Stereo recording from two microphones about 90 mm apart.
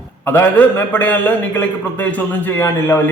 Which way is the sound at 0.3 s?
20° left (ahead or behind).